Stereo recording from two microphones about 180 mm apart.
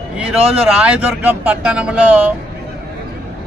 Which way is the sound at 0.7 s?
5° right (ahead or behind).